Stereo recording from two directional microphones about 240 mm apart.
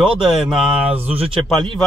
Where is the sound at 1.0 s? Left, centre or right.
Right.